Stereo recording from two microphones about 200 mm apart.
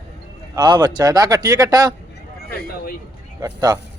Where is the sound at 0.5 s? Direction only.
20° right (ahead or behind).